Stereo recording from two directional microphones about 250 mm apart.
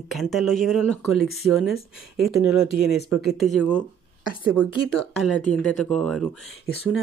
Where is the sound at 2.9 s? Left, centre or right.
Left.